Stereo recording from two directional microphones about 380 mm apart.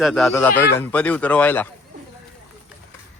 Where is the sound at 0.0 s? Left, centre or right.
Centre.